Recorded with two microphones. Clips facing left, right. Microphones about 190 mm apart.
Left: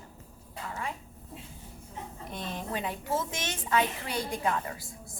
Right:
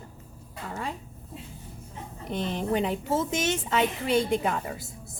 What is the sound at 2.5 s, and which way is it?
A woman's voice, 20° right (ahead or behind).